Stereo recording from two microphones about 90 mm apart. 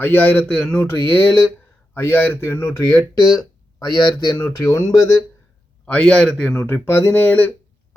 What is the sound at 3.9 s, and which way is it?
Speech, 60° left (ahead or behind).